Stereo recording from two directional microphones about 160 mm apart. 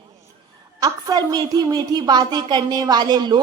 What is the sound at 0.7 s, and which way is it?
A woman's voice, 25° right (ahead or behind).